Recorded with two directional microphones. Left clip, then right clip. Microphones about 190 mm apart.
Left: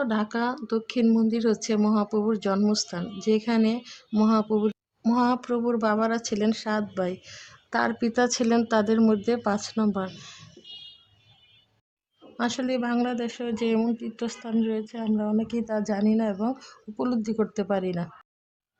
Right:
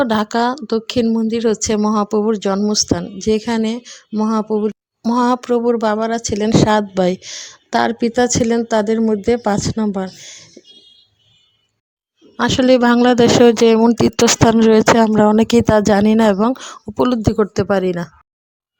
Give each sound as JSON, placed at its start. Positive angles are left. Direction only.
{"t": 0.0, "sound": "speech", "side_deg": -45}
{"t": 1.0, "sound": "speech", "side_deg": -30}
{"t": 12.4, "sound": "speech", "side_deg": -45}
{"t": 13.9, "sound": "speech", "side_deg": -60}